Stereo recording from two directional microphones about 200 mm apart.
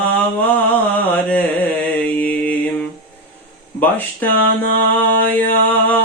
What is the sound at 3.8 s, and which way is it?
Mantra, 10° left (ahead or behind).